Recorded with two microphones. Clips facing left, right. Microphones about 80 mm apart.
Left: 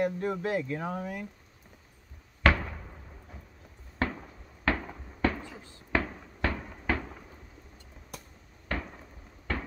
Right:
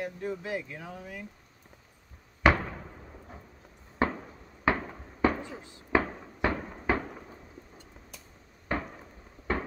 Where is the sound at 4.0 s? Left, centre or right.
Centre.